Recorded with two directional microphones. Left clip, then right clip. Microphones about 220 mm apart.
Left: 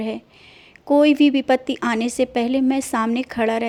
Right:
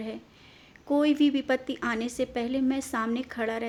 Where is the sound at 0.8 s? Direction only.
30° left (ahead or behind).